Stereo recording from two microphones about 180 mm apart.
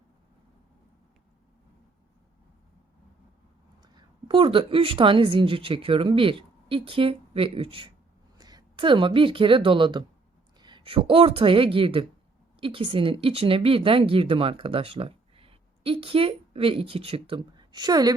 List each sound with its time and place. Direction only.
3.8 s a woman's voice: 25° right (ahead or behind)